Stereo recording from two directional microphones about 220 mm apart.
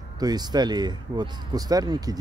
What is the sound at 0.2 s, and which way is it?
Speech, 20° right (ahead or behind).